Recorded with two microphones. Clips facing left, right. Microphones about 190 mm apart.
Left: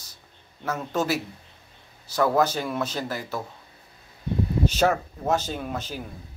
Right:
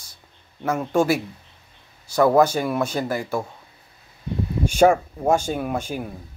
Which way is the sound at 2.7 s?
10° right (ahead or behind).